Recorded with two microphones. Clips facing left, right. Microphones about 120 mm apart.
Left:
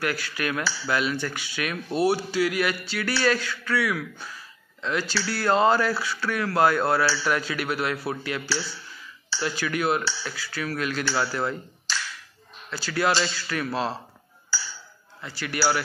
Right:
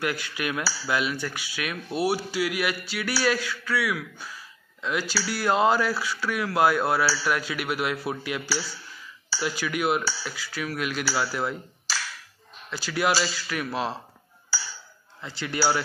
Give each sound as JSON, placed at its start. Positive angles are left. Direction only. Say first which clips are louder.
{"t": 0.0, "sound": "speech", "louder": "left 1 dB", "side_deg": -15}
{"t": 15.2, "sound": "a man's voice", "louder": "even", "side_deg": -20}